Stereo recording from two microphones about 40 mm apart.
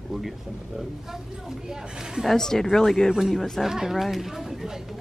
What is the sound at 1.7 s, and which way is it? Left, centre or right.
Speech, centre.